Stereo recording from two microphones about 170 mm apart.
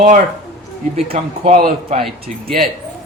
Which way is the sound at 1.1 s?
40° right (ahead or behind).